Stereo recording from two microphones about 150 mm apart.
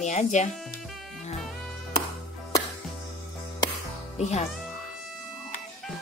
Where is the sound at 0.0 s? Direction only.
50° left (ahead or behind).